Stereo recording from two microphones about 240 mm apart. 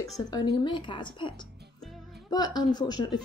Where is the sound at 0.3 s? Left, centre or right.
Centre.